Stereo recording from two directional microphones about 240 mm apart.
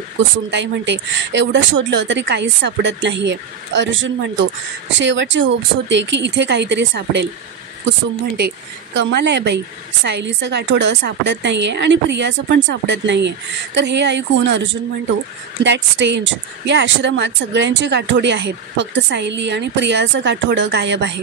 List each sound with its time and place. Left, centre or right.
0.5 s speech: right
8.4 s speech: right